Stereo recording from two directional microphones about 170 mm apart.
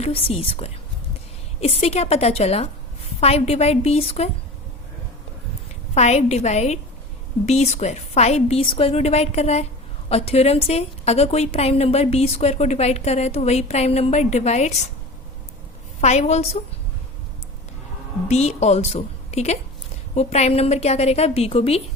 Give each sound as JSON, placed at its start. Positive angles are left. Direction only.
{"t": 0.0, "sound": "a woman's voice", "side_deg": 35}
{"t": 5.9, "sound": "a woman's voice", "side_deg": 40}
{"t": 16.0, "sound": "a woman's voice", "side_deg": 40}
{"t": 18.3, "sound": "a woman's voice", "side_deg": 40}